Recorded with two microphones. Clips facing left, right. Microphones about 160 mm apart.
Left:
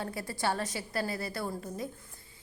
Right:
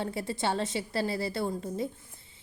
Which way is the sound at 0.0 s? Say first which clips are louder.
Right 2 dB; 25° right (ahead or behind).